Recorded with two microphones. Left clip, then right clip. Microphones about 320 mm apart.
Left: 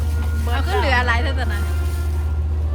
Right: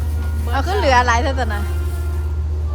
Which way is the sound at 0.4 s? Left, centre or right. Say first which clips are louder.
Right 4 dB; centre.